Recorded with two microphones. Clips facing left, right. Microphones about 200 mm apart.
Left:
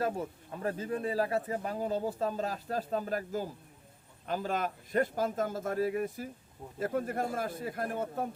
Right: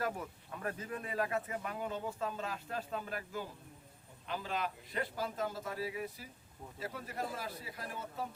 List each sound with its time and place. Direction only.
0.0 s a man's voice: 30° left (ahead or behind); by 8.3 s 50° left (ahead or behind)